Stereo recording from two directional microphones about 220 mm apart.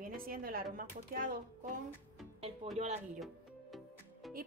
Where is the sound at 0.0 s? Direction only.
40° right (ahead or behind).